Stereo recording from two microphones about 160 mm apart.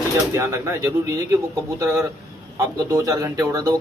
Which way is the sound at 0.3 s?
20° right (ahead or behind).